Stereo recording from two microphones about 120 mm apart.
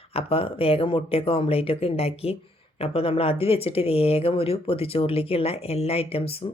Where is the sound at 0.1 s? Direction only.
55° left (ahead or behind).